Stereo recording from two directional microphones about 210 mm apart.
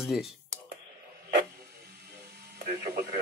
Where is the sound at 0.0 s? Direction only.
Centre (ahead or behind).